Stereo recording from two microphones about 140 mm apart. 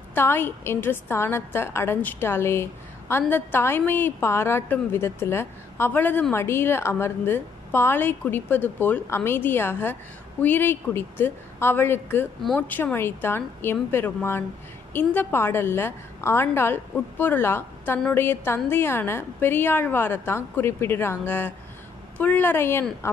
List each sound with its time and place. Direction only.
0.1 s a woman's voice: 15° left (ahead or behind)